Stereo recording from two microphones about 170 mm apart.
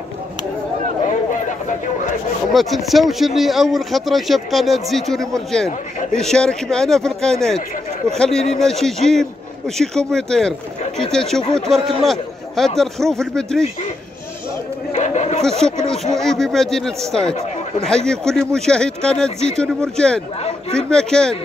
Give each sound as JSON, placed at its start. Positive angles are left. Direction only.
{"t": 2.5, "sound": "speech", "side_deg": 0}
{"t": 15.0, "sound": "a sound", "side_deg": 40}
{"t": 16.2, "sound": "speech", "side_deg": 0}